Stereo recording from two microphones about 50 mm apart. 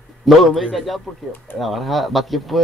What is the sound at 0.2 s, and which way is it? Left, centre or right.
Speech, centre.